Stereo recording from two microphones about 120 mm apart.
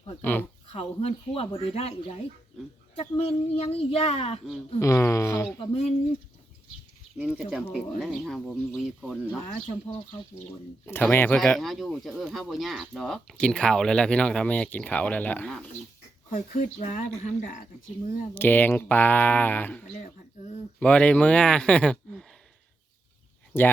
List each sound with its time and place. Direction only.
0.2 s speech: 15° left (ahead or behind)
0.7 s speech: 55° left (ahead or behind)
4.8 s speech: 25° left (ahead or behind)
5.5 s speech: 55° left (ahead or behind)
7.2 s speech: 10° right (ahead or behind)
7.7 s speech: 5° left (ahead or behind)
10.8 s speech: 15° left (ahead or behind)
11.3 s speech: 5° left (ahead or behind)
16.5 s speech: 90° left
18.3 s speech: 15° left (ahead or behind)
23.5 s speech: 20° left (ahead or behind)